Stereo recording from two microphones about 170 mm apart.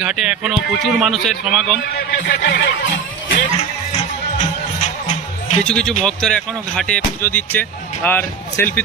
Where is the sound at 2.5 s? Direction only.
75° left (ahead or behind).